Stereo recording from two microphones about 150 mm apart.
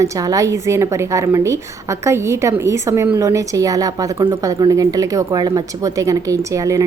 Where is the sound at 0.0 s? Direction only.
20° right (ahead or behind).